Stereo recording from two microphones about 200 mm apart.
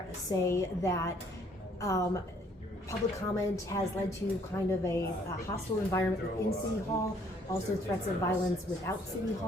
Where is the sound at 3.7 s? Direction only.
15° left (ahead or behind).